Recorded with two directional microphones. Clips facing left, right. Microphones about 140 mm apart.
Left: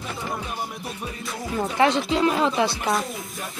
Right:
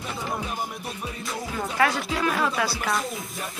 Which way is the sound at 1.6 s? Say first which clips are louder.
Left 4 dB; 25° left (ahead or behind).